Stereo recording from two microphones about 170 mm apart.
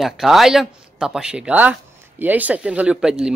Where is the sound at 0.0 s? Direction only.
Centre (ahead or behind).